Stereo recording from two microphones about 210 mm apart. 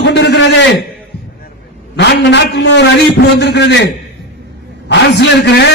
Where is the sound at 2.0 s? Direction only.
55° left (ahead or behind).